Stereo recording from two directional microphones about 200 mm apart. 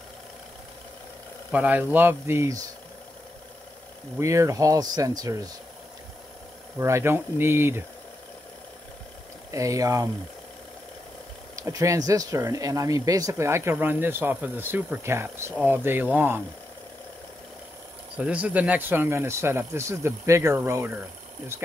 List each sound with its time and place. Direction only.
1.5 s speech: 5° right (ahead or behind)
4.2 s speech: 15° right (ahead or behind)
6.8 s speech: 15° right (ahead or behind)
9.5 s speech: 15° right (ahead or behind)
11.5 s speech: 15° right (ahead or behind)
18.1 s speech: 5° right (ahead or behind)